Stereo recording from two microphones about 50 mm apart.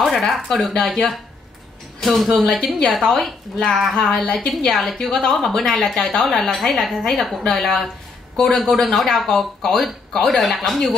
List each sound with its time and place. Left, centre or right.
0.0 s a sound: centre
0.5 s a woman's voice: centre
4.1 s a woman's voice: left
4.6 s a woman's voice: centre